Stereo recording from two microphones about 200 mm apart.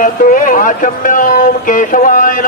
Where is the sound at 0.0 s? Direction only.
45° left (ahead or behind).